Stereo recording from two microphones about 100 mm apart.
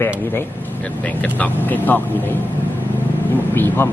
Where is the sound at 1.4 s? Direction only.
20° left (ahead or behind).